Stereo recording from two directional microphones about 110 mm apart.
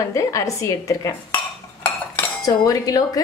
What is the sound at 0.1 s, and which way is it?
Dishes, 30° left (ahead or behind).